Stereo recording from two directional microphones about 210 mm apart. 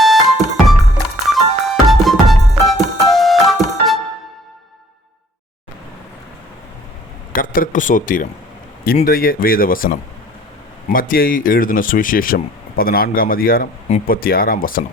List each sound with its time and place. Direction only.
0.0 s music: centre (ahead or behind)
7.3 s speech: 40° left (ahead or behind)